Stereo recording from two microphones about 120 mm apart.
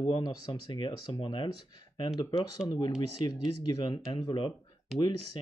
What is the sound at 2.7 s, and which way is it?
Speech, 40° left (ahead or behind).